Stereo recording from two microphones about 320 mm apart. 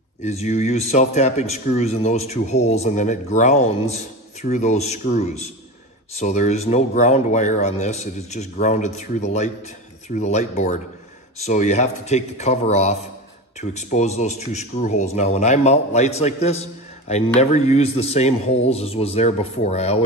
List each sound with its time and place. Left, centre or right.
0.2 s speech: left